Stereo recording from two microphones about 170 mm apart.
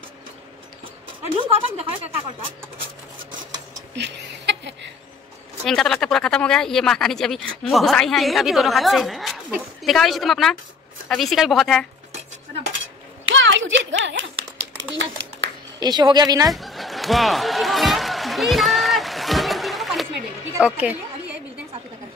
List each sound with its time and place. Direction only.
1.5 s speech: 35° right (ahead or behind)
3.9 s a sound: 90° right
5.7 s speech: 5° left (ahead or behind)
13.3 s a sound: 90° right
15.8 s a woman's voice: 25° right (ahead or behind)
16.4 s basketball bounce: centre (ahead or behind)
20.6 s a woman's voice: 10° right (ahead or behind)